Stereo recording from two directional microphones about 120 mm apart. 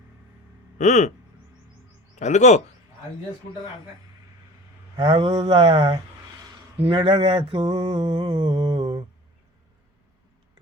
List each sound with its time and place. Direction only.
0.8 s speech: 75° left (ahead or behind)
2.1 s speech: 75° left (ahead or behind)
4.9 s a sound: 45° right (ahead or behind)
6.7 s mantra: 50° right (ahead or behind)